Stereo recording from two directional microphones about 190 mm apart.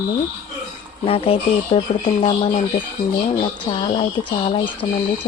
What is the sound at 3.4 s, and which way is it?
Speech, 25° left (ahead or behind).